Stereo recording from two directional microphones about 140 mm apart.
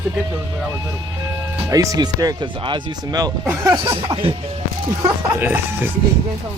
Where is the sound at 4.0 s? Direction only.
35° right (ahead or behind).